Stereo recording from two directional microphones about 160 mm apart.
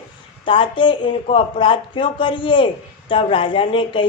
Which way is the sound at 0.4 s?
30° left (ahead or behind).